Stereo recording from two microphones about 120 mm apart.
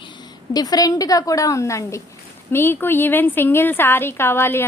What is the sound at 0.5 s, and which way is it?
A woman's voice, 30° left (ahead or behind).